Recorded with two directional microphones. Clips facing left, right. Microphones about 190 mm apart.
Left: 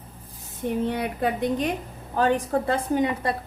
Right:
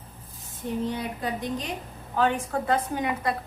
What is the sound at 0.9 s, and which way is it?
Speech, 65° left (ahead or behind).